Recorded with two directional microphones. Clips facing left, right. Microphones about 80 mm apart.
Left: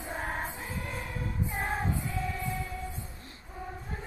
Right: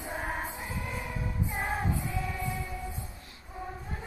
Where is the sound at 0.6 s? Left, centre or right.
Centre.